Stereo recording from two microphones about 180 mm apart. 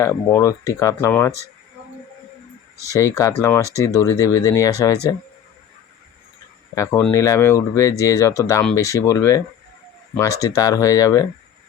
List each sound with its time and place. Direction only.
0.0 s speech: 15° left (ahead or behind)
2.9 s speech: 20° left (ahead or behind)
6.7 s speech: 15° left (ahead or behind)
10.4 s speech: 20° left (ahead or behind)